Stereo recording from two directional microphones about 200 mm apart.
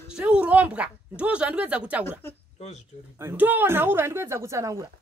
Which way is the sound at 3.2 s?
10° right (ahead or behind).